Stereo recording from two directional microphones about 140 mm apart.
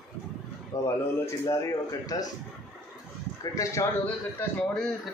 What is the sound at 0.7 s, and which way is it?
Speech, 25° left (ahead or behind).